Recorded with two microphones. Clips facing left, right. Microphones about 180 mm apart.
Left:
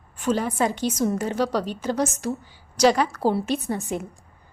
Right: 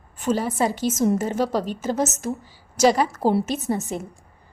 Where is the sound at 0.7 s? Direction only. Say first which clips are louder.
Right 3 dB; 45° right (ahead or behind).